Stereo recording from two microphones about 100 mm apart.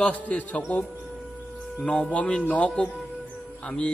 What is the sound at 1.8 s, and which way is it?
Speech, 10° left (ahead or behind).